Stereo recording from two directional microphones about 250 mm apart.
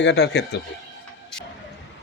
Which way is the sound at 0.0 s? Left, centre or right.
Left.